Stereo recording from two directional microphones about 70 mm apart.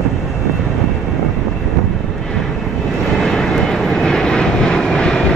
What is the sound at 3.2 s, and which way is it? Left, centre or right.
Vehicle, centre.